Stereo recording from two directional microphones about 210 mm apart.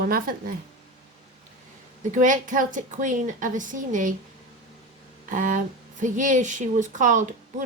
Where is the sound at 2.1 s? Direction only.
40° right (ahead or behind).